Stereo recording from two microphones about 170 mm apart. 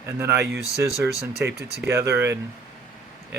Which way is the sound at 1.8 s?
15° right (ahead or behind).